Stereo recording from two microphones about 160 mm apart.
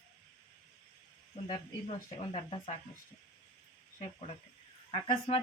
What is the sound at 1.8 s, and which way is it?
Speech, 40° left (ahead or behind).